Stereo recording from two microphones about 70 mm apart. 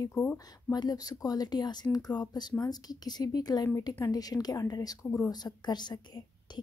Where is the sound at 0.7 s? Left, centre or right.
Left.